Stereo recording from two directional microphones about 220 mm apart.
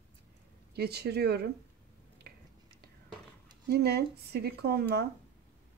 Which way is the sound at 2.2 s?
45° right (ahead or behind).